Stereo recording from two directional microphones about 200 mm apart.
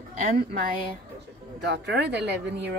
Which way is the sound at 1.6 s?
55° right (ahead or behind).